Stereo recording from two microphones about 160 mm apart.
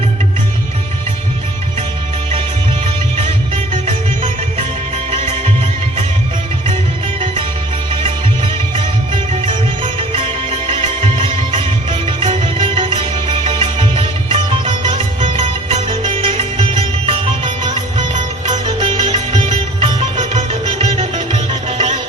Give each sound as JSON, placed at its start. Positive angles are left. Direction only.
{"t": 5.1, "sound": "music", "side_deg": -35}
{"t": 8.7, "sound": "music", "side_deg": -30}